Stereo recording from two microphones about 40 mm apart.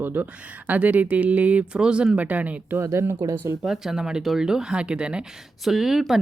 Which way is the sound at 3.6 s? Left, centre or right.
Centre.